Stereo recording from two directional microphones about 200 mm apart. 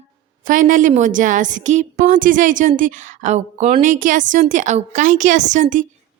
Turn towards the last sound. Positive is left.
turn(degrees=-40)  # may be behind; listen again after turning